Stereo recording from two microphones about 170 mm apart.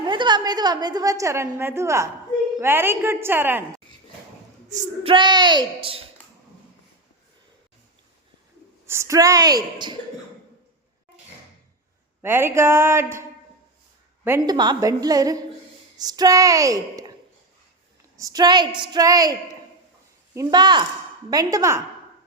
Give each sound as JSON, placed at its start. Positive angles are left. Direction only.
{"t": 0.0, "sound": "a woman's voice", "side_deg": -25}
{"t": 5.0, "sound": "a woman's voice", "side_deg": -30}
{"t": 8.9, "sound": "a woman's voice", "side_deg": -15}
{"t": 12.2, "sound": "speech", "side_deg": -15}
{"t": 14.3, "sound": "speech", "side_deg": -15}
{"t": 14.5, "sound": "a woman's voice", "side_deg": -25}
{"t": 18.2, "sound": "a woman's voice", "side_deg": -20}